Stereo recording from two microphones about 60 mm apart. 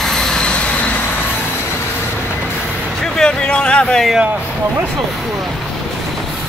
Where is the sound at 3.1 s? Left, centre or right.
Centre.